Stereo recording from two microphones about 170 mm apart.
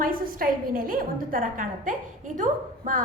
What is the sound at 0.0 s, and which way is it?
A woman's voice, 55° right (ahead or behind).